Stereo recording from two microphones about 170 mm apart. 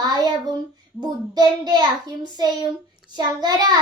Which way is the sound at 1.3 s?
25° right (ahead or behind).